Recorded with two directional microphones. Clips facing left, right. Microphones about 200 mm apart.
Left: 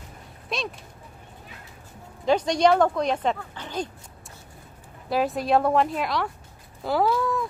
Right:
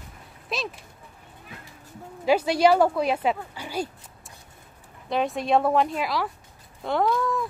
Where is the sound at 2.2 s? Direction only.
5° right (ahead or behind).